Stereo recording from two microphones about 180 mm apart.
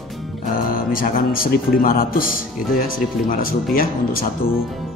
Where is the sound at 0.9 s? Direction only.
55° left (ahead or behind).